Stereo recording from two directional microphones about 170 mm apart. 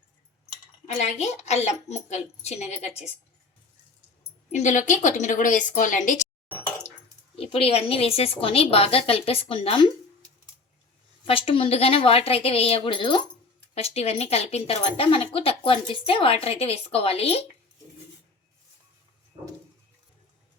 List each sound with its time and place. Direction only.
0.9 s speech: 40° left (ahead or behind)
4.5 s a woman's voice: 45° left (ahead or behind)
7.3 s speech: 35° left (ahead or behind)
11.3 s speech: 35° left (ahead or behind)